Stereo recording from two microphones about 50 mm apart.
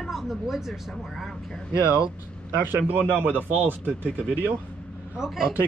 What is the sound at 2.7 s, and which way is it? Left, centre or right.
Speech, right.